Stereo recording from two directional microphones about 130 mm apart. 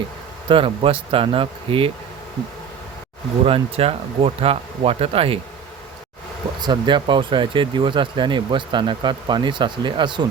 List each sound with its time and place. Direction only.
0.4 s speech: 40° right (ahead or behind)
3.4 s speech: 45° right (ahead or behind)
6.6 s speech: 35° right (ahead or behind)